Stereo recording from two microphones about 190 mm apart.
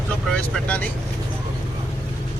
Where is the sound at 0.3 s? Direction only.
5° left (ahead or behind).